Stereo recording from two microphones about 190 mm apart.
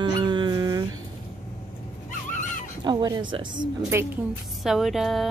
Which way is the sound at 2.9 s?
20° right (ahead or behind).